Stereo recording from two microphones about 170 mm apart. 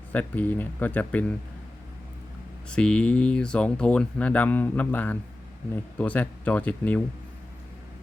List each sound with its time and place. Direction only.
0.1 s speech: 10° left (ahead or behind)
2.6 s speech: 5° left (ahead or behind)